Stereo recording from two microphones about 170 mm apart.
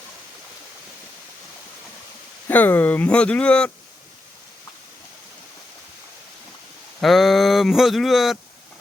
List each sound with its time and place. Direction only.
2.5 s speech: 10° left (ahead or behind)
7.0 s speech: centre (ahead or behind)